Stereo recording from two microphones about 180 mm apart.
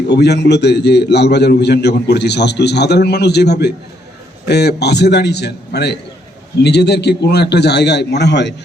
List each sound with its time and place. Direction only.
0.1 s a man's voice: 70° left (ahead or behind)